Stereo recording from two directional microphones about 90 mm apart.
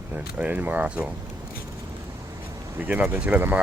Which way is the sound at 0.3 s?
15° right (ahead or behind).